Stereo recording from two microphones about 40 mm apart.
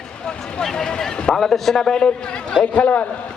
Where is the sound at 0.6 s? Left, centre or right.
Centre.